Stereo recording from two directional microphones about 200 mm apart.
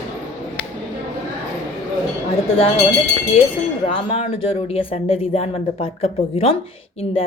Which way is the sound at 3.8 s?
30° left (ahead or behind).